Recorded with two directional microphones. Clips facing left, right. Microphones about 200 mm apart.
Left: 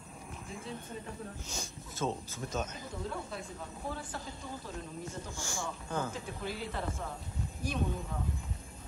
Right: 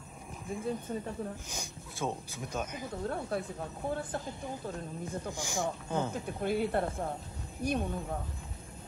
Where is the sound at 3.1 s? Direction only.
60° right (ahead or behind).